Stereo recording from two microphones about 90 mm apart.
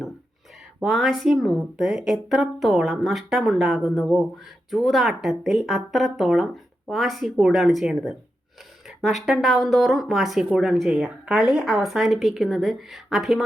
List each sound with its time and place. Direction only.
0.8 s speech: centre (ahead or behind)